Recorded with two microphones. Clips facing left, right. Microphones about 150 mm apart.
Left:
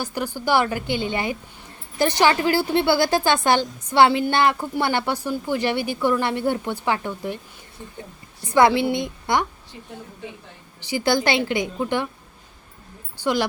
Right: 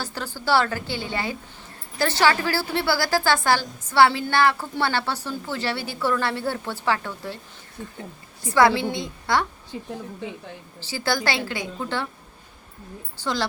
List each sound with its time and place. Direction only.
0.0 s a woman's voice: 15° left (ahead or behind)
8.5 s a woman's voice: 20° left (ahead or behind)
10.8 s a woman's voice: 15° left (ahead or behind)